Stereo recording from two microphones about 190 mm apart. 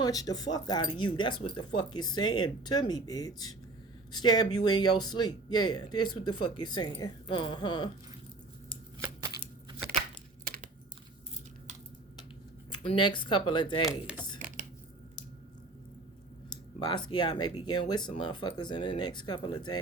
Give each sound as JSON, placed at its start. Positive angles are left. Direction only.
{"t": 0.0, "sound": "speech", "side_deg": 20}
{"t": 9.0, "sound": "a sound", "side_deg": -15}
{"t": 12.7, "sound": "speech", "side_deg": 25}
{"t": 16.8, "sound": "speech", "side_deg": 25}